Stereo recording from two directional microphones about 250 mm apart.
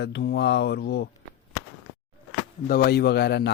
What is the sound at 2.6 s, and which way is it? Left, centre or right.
Speech, left.